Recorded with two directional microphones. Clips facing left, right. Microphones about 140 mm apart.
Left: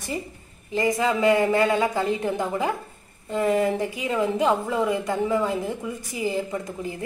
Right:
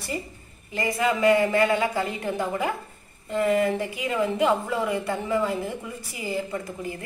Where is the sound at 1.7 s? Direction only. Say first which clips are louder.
Left 2 dB; 20° left (ahead or behind).